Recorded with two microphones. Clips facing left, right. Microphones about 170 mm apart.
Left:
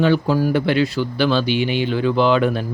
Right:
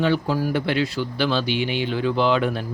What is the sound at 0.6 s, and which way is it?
Speech, 60° left (ahead or behind).